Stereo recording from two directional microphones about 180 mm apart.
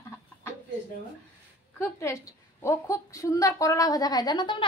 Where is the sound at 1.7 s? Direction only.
15° left (ahead or behind).